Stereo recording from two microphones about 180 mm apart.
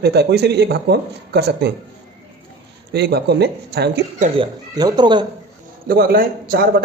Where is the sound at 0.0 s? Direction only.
65° right (ahead or behind).